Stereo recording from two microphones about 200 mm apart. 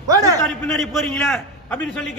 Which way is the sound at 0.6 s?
5° left (ahead or behind).